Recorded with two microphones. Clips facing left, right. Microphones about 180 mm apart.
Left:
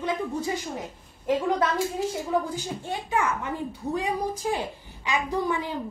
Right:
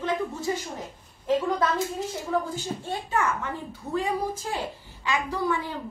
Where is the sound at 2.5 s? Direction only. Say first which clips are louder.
Even; 10° left (ahead or behind).